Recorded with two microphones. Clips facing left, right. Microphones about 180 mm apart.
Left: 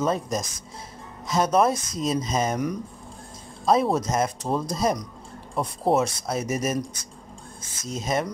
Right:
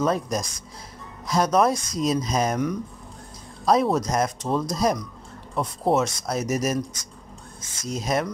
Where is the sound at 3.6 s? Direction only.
Centre (ahead or behind).